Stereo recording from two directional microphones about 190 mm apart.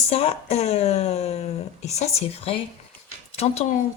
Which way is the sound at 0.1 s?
35° left (ahead or behind).